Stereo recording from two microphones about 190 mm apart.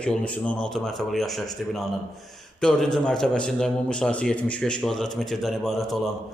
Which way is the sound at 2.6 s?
5° left (ahead or behind).